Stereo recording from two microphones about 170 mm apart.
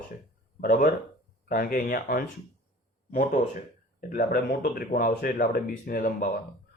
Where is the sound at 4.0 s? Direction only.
55° left (ahead or behind).